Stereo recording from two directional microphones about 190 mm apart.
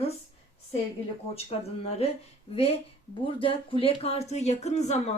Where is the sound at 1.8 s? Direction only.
35° left (ahead or behind).